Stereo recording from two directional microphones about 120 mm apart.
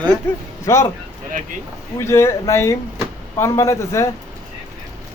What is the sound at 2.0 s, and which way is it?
Speech, 20° left (ahead or behind).